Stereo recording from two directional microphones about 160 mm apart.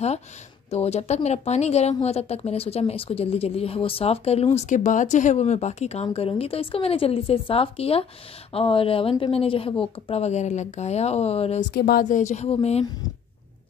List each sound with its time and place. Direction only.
0.7 s a woman's voice: 40° left (ahead or behind)
11.7 s a woman's voice: 65° left (ahead or behind); by 12.8 s 40° left (ahead or behind)